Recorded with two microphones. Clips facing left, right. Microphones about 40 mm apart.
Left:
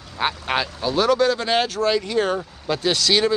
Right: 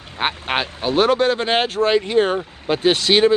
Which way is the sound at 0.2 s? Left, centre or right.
Right.